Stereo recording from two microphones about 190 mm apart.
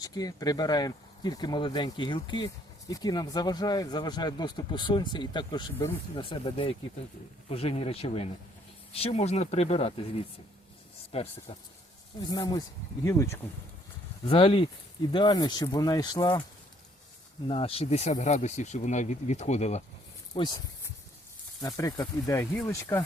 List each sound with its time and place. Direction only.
0.0 s speech: 20° left (ahead or behind)
11.1 s speech: 30° left (ahead or behind)
12.3 s speech: 20° left (ahead or behind)
14.3 s speech: 25° left (ahead or behind)
17.5 s speech: 30° left (ahead or behind)
20.3 s speech: 25° left (ahead or behind)
21.6 s speech: 20° left (ahead or behind)